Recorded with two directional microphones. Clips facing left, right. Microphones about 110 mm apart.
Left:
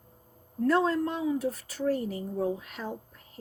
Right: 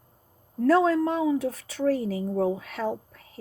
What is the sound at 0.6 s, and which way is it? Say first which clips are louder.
Speech: right 5 dB; 80° right.